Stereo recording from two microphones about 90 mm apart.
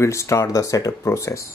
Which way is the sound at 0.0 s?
35° left (ahead or behind).